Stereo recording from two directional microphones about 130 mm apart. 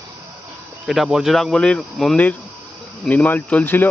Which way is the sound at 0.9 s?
Centre (ahead or behind).